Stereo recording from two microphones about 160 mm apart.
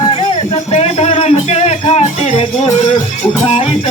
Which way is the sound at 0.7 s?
40° left (ahead or behind).